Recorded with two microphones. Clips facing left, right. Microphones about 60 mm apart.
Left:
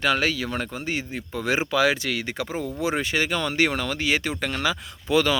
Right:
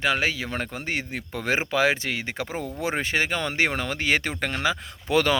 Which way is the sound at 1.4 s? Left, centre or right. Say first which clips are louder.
Left 1 dB; right.